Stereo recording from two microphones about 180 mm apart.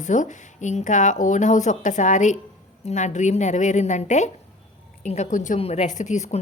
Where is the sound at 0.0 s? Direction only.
45° left (ahead or behind).